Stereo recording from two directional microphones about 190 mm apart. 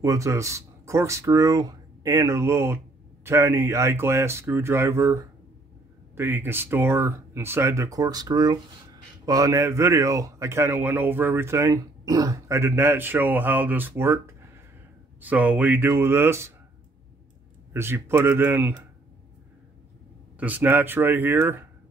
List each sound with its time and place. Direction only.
0.0 s speech: 15° right (ahead or behind)
17.7 s speech: 10° right (ahead or behind)
20.3 s speech: 10° right (ahead or behind)